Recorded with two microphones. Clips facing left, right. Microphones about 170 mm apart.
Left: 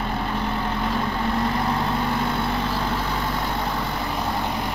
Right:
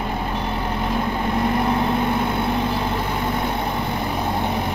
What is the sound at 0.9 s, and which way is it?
Vehicle, 15° right (ahead or behind).